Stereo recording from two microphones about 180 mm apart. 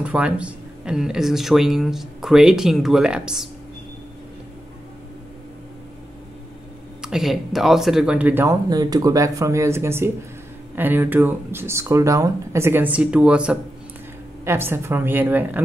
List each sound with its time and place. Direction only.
0.0 s speech: 5° right (ahead or behind)
7.0 s speech: centre (ahead or behind)